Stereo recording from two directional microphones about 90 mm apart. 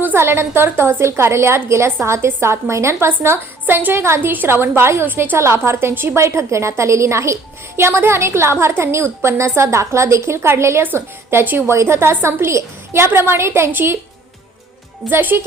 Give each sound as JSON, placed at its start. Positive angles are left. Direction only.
{"t": 0.0, "sound": "a woman's voice", "side_deg": -25}
{"t": 15.1, "sound": "a woman's voice", "side_deg": -20}